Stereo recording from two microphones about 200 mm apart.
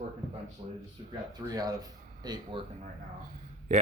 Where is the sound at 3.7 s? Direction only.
35° right (ahead or behind).